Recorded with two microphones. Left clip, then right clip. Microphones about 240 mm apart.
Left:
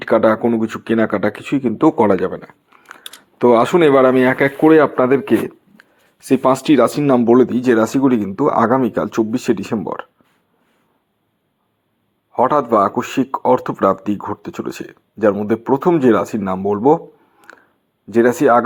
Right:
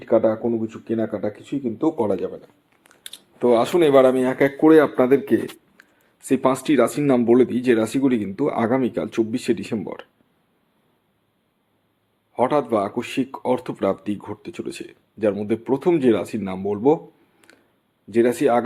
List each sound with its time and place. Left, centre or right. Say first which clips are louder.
0.0 s speech: left 5 dB; left; by 4.5 s centre
4.6 s a man's voice: left 3 dB; centre
12.3 s a man's voice: left 6 dB; centre
18.1 s a man's voice: left 6 dB; centre